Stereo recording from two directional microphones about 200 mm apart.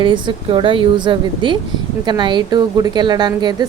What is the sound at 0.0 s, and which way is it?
Speech, 25° right (ahead or behind).